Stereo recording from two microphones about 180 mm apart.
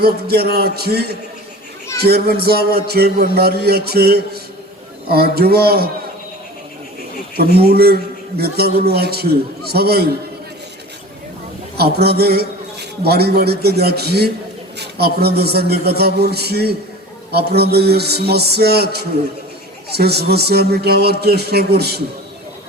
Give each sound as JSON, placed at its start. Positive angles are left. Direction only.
{"t": 0.0, "sound": "a man's voice", "side_deg": -60}
{"t": 7.3, "sound": "a man's voice", "side_deg": -60}
{"t": 11.8, "sound": "a man's voice", "side_deg": -60}